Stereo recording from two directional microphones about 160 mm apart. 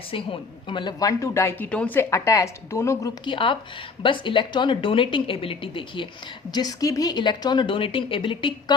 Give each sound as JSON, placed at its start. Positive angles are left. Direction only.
{"t": 0.1, "sound": "a woman's voice", "side_deg": 35}
{"t": 3.2, "sound": "a woman's voice", "side_deg": 30}